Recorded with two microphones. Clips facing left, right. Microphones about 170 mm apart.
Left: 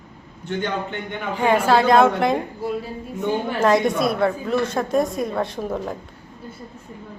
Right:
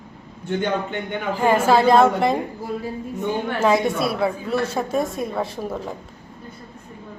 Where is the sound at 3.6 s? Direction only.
5° right (ahead or behind).